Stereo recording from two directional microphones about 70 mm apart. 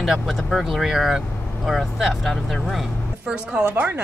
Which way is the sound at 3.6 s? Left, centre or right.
Right.